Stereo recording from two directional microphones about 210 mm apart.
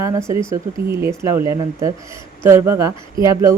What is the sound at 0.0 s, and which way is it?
Speech, 15° right (ahead or behind).